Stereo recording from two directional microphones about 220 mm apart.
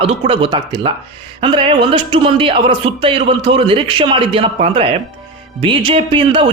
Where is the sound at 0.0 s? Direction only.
25° right (ahead or behind).